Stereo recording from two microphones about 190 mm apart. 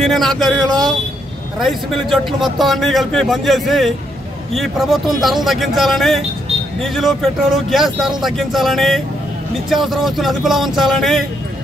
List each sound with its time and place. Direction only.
0.0 s speech: centre (ahead or behind)